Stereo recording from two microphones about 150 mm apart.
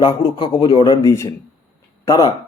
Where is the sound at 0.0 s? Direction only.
30° left (ahead or behind).